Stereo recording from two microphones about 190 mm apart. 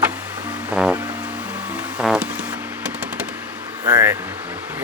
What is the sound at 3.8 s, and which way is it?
Vehicle, 15° right (ahead or behind).